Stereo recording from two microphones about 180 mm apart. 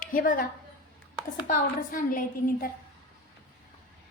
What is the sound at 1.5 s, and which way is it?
A woman's voice, 50° left (ahead or behind).